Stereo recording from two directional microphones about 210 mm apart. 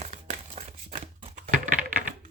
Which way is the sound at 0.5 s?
30° right (ahead or behind).